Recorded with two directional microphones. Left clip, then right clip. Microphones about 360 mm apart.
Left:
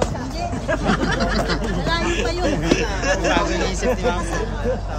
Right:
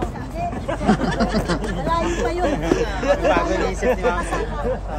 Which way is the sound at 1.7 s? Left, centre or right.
Centre.